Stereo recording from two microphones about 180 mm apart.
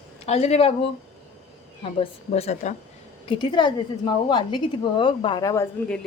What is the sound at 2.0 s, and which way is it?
Speech, 35° left (ahead or behind).